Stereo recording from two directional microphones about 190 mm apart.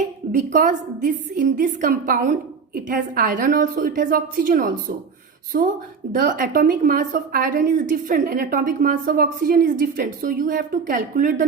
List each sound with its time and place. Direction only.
0.3 s a woman's voice: 45° right (ahead or behind)